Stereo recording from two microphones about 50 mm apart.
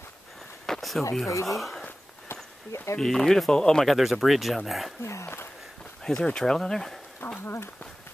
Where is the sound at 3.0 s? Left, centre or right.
Centre.